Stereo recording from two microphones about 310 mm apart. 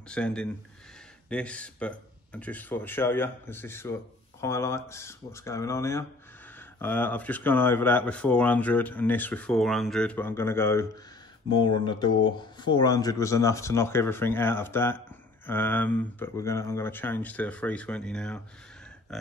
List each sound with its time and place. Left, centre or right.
0.1 s speech: centre